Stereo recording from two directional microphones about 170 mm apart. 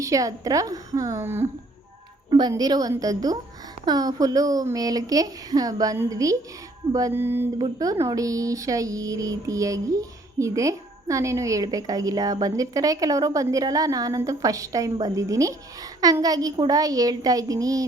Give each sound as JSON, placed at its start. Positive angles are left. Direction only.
{"t": 0.0, "sound": "speech", "side_deg": -20}
{"t": 6.9, "sound": "music", "side_deg": -15}
{"t": 7.6, "sound": "speech", "side_deg": -20}